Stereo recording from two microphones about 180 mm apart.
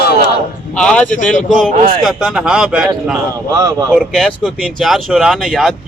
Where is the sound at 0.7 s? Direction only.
5° left (ahead or behind).